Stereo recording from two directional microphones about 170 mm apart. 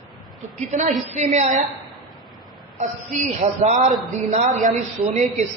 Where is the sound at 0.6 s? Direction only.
45° right (ahead or behind).